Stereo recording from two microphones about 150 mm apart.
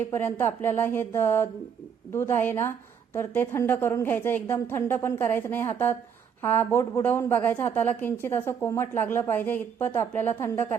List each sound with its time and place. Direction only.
0.1 s a woman's voice: 15° left (ahead or behind)